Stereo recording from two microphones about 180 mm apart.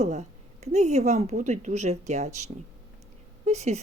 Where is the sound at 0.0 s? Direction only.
40° right (ahead or behind).